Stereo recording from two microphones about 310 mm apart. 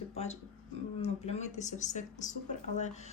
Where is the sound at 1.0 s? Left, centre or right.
Left.